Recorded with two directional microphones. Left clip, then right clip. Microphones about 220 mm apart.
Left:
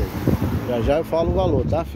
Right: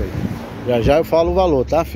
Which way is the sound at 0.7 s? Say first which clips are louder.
Right 6 dB; 25° right (ahead or behind).